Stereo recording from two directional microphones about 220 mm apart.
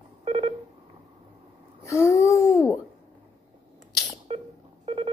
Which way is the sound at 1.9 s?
15° left (ahead or behind).